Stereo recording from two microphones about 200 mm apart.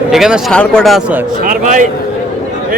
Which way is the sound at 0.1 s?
Centre (ahead or behind).